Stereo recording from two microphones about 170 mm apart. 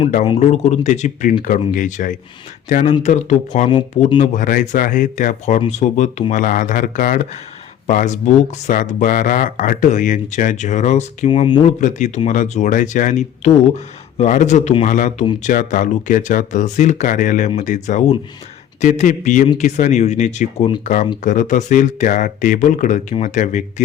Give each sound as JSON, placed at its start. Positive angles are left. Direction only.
{"t": 0.3, "sound": "speech", "side_deg": 40}
{"t": 11.3, "sound": "speech", "side_deg": 30}
{"t": 11.6, "sound": "speech", "side_deg": 45}